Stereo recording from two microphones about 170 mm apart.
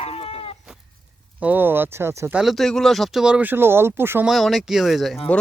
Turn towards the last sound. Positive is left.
turn(degrees=0)  # may be behind; listen again after turning